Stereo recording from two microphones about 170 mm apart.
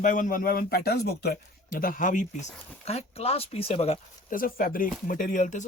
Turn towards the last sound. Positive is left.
turn(degrees=45)  # may be behind; listen again after turning